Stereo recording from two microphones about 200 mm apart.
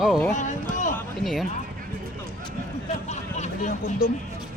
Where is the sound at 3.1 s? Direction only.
35° left (ahead or behind).